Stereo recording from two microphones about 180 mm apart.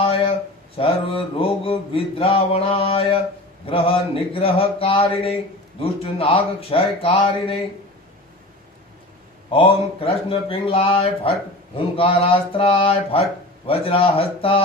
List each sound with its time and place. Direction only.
0.0 s a sound: 30° left (ahead or behind)
0.7 s speech: 30° left (ahead or behind)
9.5 s speech: 30° left (ahead or behind)